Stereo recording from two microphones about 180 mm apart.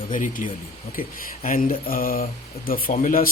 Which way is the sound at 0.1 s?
45° left (ahead or behind).